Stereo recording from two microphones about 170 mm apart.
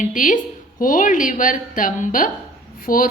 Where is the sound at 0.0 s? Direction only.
50° left (ahead or behind).